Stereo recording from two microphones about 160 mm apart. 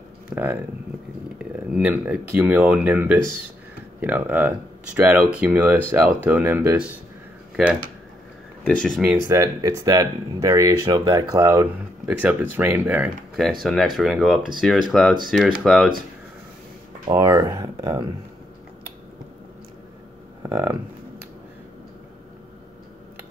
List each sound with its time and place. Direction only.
0.3 s speech: 10° right (ahead or behind)
8.6 s speech: 5° left (ahead or behind)
9.3 s speech: 20° right (ahead or behind)
13.4 s speech: centre (ahead or behind)
17.1 s speech: 20° right (ahead or behind)
20.4 s speech: 20° right (ahead or behind)